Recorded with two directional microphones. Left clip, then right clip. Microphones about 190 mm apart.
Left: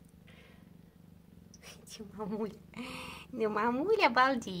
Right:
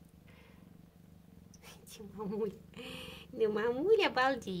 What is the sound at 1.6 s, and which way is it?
Speech, centre (ahead or behind).